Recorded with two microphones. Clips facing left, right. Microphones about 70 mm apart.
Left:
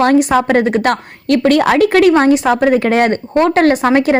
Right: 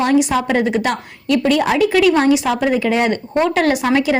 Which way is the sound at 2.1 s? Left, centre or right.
Left.